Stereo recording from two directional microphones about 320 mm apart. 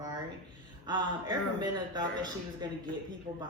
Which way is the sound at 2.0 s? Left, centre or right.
Centre.